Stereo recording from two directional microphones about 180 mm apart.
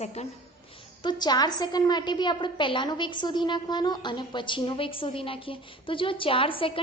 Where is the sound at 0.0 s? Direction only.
35° left (ahead or behind).